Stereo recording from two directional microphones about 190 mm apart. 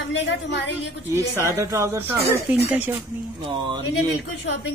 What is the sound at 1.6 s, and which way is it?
Speech, 15° right (ahead or behind).